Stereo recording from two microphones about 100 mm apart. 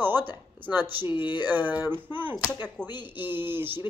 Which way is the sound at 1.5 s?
20° right (ahead or behind).